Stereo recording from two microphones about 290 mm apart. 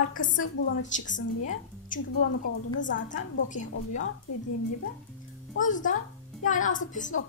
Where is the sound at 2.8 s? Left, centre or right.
Left.